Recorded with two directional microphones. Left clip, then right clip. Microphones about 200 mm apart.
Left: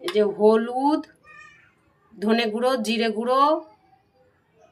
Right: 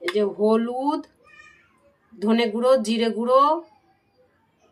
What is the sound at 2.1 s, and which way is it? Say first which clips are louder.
Speech: even; 15° left (ahead or behind).